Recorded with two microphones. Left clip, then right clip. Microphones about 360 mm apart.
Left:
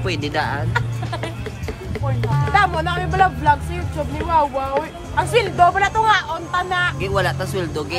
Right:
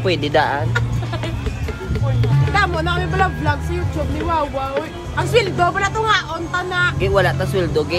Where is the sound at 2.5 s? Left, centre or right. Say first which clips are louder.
Left 1 dB; centre.